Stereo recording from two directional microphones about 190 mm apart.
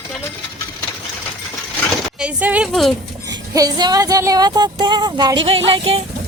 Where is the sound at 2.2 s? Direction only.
5° right (ahead or behind).